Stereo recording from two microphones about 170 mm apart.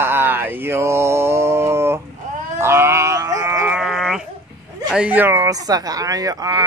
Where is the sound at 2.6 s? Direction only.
15° right (ahead or behind).